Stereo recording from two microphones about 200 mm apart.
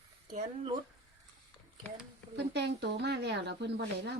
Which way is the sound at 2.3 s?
60° right (ahead or behind).